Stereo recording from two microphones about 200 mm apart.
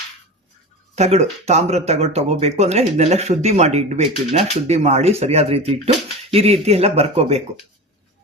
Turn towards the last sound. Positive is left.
turn(degrees=-30)  # may be behind; listen again after turning